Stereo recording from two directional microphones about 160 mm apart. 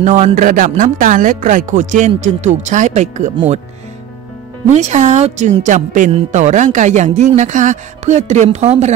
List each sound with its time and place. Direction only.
0.0 s speech: 50° right (ahead or behind)
4.6 s speech: 45° right (ahead or behind)